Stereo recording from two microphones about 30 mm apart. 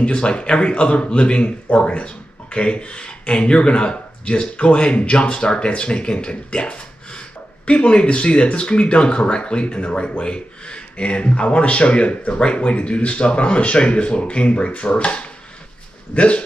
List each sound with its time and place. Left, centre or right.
0.0 s speech: left